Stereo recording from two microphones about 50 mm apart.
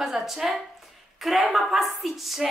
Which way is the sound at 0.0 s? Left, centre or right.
Centre.